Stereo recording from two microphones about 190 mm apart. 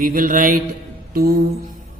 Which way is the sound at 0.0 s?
50° right (ahead or behind).